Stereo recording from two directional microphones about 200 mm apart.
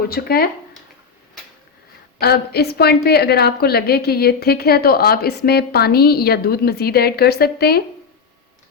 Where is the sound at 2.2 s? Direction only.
55° left (ahead or behind).